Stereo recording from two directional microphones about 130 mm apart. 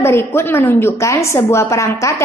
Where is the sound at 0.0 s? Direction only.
20° left (ahead or behind).